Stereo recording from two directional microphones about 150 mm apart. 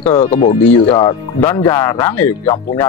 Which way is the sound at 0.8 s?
25° left (ahead or behind).